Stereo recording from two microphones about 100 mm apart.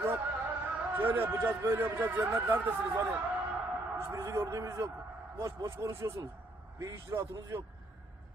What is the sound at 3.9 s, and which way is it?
A man's voice, 30° right (ahead or behind).